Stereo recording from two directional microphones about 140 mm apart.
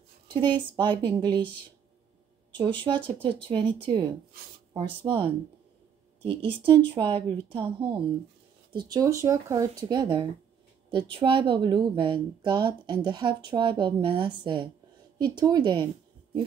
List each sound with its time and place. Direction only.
0.3 s speech: 35° right (ahead or behind)
2.5 s speech: 35° right (ahead or behind)
6.2 s speech: 40° right (ahead or behind)
8.7 s speech: 25° right (ahead or behind)